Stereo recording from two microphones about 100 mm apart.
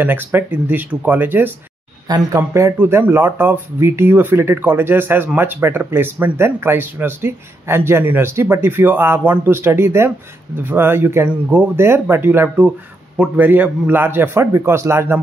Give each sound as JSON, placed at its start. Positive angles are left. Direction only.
{"t": 0.0, "sound": "speech", "side_deg": -20}